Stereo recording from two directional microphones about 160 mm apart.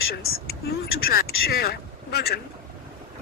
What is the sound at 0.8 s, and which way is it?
Speech, 70° left (ahead or behind).